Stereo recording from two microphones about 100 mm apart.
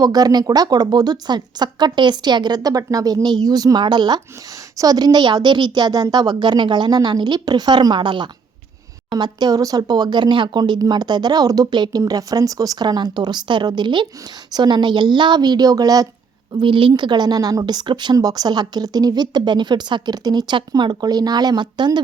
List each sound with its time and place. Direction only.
0.0 s a woman's voice: 40° right (ahead or behind)
16.6 s a woman's voice: 55° right (ahead or behind)